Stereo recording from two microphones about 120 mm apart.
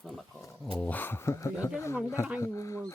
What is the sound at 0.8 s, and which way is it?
Speech, 15° left (ahead or behind).